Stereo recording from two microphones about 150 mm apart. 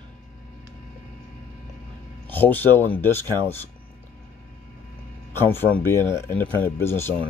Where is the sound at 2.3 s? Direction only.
10° left (ahead or behind).